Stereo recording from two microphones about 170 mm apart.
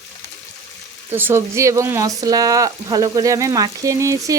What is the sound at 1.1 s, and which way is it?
Speech, 15° right (ahead or behind).